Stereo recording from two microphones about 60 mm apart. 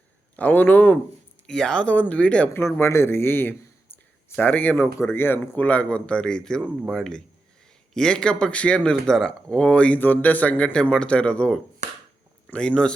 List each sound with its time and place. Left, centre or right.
0.3 s a man's voice: left
1.5 s a man's voice: centre
2.8 s a man's voice: left
4.8 s speech: left
5.5 s a man's voice: left